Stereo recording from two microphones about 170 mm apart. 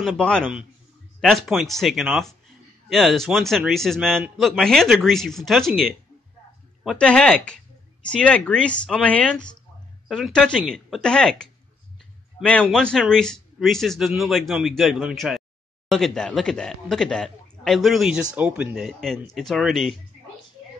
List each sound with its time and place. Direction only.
0.0 s speech: 5° left (ahead or behind)